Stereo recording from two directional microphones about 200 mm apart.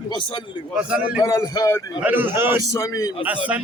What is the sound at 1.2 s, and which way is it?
Music, 15° left (ahead or behind).